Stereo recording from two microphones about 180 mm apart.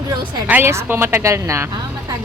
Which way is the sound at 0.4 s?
10° right (ahead or behind).